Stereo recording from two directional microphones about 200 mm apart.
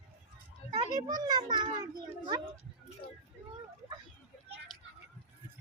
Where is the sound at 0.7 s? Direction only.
20° right (ahead or behind).